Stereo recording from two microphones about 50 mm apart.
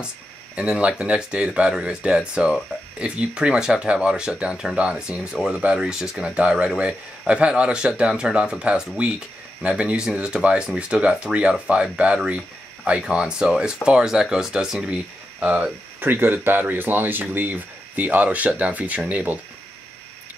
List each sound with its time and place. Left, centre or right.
0.7 s speech: right
7.2 s speech: right
16.0 s speech: right